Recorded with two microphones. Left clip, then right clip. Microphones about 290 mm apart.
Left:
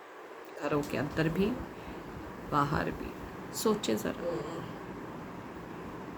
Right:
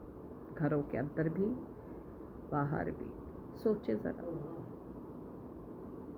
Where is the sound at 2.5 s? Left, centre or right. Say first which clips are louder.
Left 6 dB; centre.